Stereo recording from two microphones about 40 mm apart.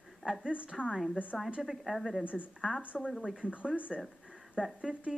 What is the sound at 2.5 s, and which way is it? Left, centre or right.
Speech, centre.